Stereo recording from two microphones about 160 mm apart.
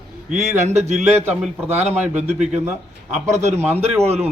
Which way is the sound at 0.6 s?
45° right (ahead or behind).